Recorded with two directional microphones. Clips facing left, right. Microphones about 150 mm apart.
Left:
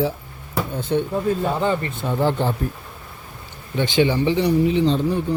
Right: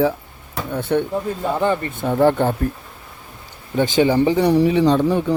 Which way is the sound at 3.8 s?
40° right (ahead or behind).